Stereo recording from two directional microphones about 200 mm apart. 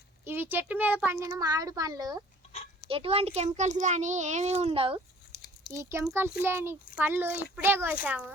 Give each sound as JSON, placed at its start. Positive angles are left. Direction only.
{"t": 0.3, "sound": "a child's voice", "side_deg": -10}
{"t": 5.3, "sound": "a sound", "side_deg": 55}
{"t": 5.7, "sound": "speech", "side_deg": -15}